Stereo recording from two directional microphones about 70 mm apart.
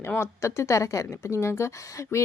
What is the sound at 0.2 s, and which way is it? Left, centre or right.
A woman's voice, left.